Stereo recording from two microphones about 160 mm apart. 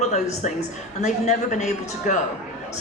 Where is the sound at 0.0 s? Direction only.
45° left (ahead or behind).